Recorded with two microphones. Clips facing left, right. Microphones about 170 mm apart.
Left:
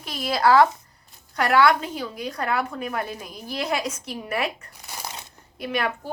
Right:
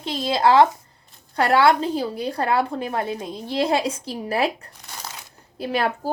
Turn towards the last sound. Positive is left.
turn(degrees=-35)  # may be behind; listen again after turning